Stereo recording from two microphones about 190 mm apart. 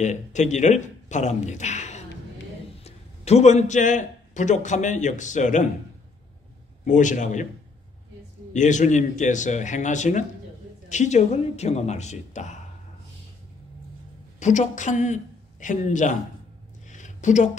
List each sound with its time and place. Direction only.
0.0 s a man's voice: 40° left (ahead or behind)
6.8 s speech: 40° left (ahead or behind)
8.5 s speech: 40° left (ahead or behind)
14.4 s speech: 40° left (ahead or behind)
16.9 s a sound: 40° left (ahead or behind)